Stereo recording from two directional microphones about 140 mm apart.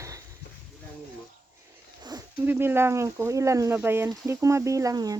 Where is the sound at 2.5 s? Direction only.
15° right (ahead or behind).